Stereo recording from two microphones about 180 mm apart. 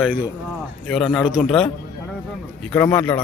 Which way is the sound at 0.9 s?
5° left (ahead or behind).